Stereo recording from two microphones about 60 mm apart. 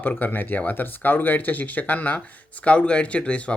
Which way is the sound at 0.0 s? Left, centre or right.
Left.